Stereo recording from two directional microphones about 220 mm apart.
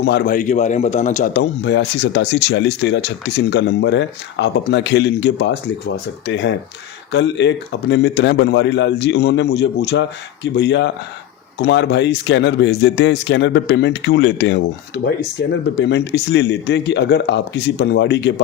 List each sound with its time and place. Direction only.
0.0 s a man's voice: 50° left (ahead or behind)
1.4 s speech: 50° left (ahead or behind)